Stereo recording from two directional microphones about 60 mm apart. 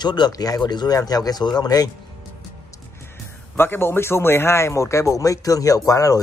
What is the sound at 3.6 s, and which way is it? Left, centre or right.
A man's voice, left.